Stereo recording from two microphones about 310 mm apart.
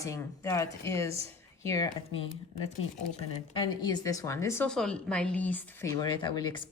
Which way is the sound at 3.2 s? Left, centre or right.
Centre.